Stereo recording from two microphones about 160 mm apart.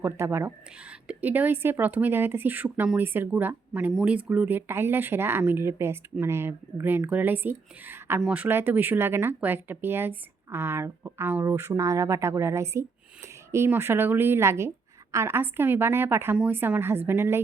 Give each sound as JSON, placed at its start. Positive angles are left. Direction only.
{"t": 0.0, "sound": "speech", "side_deg": -15}